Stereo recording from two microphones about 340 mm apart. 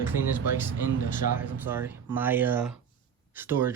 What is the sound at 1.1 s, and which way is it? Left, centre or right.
Speech, left.